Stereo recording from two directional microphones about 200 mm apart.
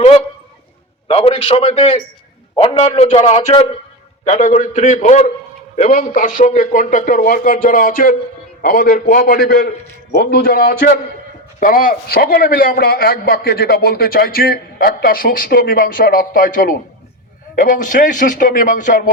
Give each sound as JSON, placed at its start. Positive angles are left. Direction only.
{"t": 1.0, "sound": "a man's voice", "side_deg": 30}